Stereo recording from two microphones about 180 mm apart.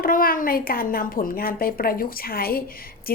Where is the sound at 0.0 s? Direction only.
50° left (ahead or behind).